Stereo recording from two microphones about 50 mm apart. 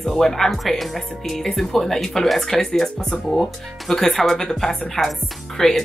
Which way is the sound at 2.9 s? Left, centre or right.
Centre.